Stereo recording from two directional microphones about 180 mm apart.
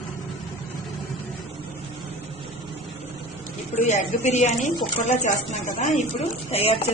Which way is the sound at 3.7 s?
40° left (ahead or behind).